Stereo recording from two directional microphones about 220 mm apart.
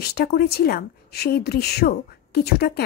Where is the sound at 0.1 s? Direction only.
45° left (ahead or behind).